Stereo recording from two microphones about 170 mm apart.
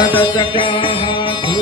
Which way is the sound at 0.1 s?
30° left (ahead or behind).